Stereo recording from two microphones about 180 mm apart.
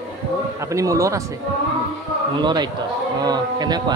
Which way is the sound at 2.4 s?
25° right (ahead or behind).